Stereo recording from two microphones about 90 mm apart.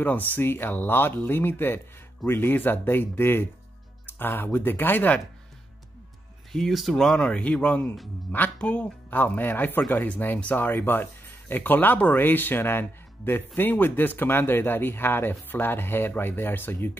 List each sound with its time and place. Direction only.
0.0 s a man's voice: 20° left (ahead or behind)
6.5 s a man's voice: centre (ahead or behind); by 16.9 s 25° left (ahead or behind)